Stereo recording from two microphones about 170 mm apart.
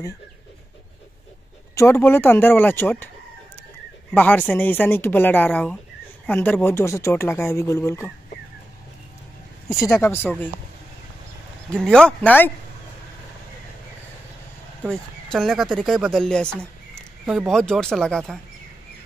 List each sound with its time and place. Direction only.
1.8 s speech: 15° left (ahead or behind)
4.1 s speech: 10° left (ahead or behind)
9.8 s speech: 15° left (ahead or behind)
11.8 s speech: 5° left (ahead or behind)
14.9 s speech: centre (ahead or behind)